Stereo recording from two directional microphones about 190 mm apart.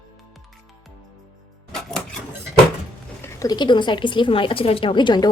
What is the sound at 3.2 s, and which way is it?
A woman's voice, 20° left (ahead or behind).